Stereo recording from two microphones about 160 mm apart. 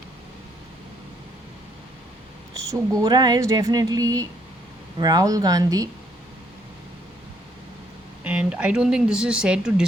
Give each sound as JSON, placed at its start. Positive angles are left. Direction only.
{"t": 2.6, "sound": "speech", "side_deg": -20}
{"t": 8.2, "sound": "speech", "side_deg": -5}